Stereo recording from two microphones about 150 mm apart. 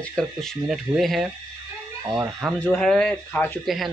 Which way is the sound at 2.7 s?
5° left (ahead or behind).